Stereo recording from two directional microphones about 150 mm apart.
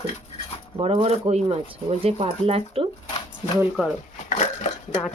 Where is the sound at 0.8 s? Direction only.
45° right (ahead or behind).